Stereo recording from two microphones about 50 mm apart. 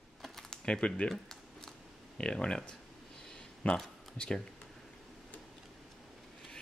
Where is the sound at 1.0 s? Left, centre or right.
Centre.